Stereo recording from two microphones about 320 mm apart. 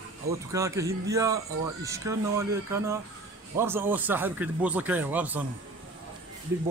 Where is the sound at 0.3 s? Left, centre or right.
Centre.